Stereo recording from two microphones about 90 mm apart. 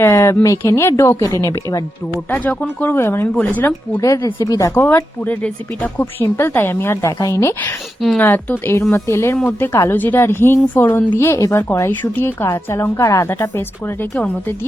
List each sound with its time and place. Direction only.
0.0 s a woman's voice: 30° left (ahead or behind)
2.3 s speech: 15° left (ahead or behind)
4.0 s a woman's voice: 40° left (ahead or behind)
4.7 s a woman's voice: 25° left (ahead or behind)
8.2 s speech: 20° left (ahead or behind)